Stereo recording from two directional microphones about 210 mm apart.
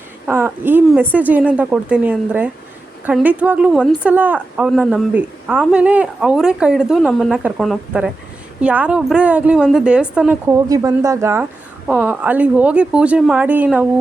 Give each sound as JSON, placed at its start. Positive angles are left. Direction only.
{"t": 0.3, "sound": "a woman's voice", "side_deg": -10}
{"t": 10.7, "sound": "a woman's voice", "side_deg": -15}